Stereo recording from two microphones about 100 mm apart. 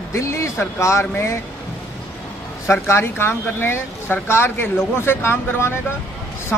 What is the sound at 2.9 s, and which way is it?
Speech, 25° left (ahead or behind).